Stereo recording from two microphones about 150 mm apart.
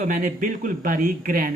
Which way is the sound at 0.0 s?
65° right (ahead or behind).